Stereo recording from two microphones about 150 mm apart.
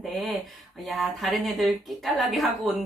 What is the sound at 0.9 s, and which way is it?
Speech, centre (ahead or behind).